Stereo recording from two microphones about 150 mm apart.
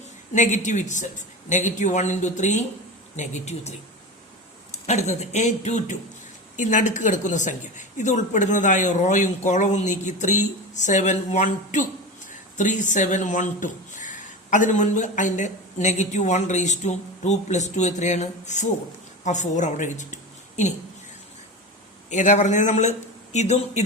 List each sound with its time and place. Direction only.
0.3 s a woman's voice: 55° left (ahead or behind)
22.1 s speech: 50° left (ahead or behind)